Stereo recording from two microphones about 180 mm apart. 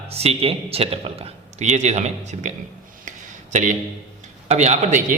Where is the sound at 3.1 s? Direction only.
45° right (ahead or behind).